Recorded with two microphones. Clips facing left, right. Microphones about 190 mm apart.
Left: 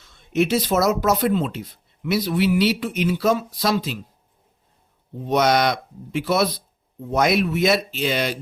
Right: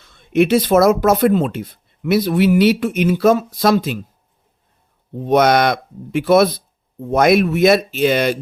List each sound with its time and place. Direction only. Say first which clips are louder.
0.0 s speech: right 6 dB; 60° right (ahead or behind)
5.2 s speech: right 5 dB; 55° right (ahead or behind)